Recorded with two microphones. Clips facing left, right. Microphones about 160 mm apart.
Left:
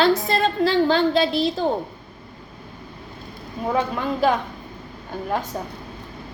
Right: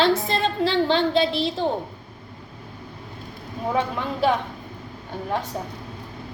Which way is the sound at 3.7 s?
25° right (ahead or behind).